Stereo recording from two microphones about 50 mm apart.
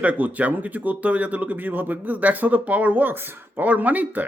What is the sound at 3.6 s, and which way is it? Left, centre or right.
Speech, right.